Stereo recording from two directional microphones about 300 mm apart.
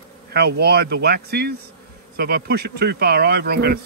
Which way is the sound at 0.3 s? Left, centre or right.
Right.